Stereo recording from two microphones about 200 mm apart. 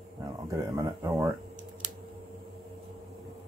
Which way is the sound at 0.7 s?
20° right (ahead or behind).